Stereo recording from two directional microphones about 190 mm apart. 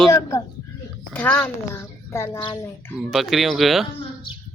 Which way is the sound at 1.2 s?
10° left (ahead or behind).